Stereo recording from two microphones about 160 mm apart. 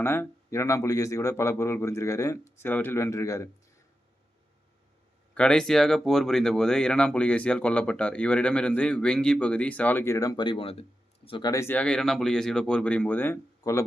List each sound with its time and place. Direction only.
0.0 s speech: 15° left (ahead or behind)
5.3 s speech: 5° left (ahead or behind); by 11.5 s 30° left (ahead or behind)
11.5 s speech: 15° left (ahead or behind)